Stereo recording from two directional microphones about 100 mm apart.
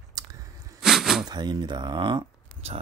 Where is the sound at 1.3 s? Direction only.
45° right (ahead or behind).